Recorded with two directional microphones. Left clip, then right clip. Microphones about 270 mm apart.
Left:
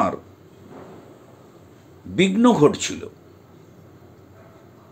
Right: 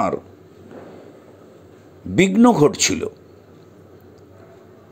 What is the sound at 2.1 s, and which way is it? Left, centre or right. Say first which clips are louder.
Speech: right 3 dB; right.